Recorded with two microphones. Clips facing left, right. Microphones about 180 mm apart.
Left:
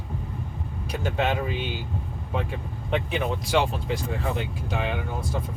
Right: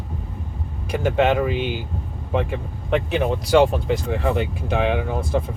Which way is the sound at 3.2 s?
50° right (ahead or behind).